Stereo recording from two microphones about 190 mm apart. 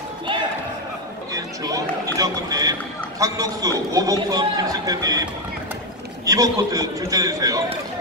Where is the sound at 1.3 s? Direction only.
20° right (ahead or behind).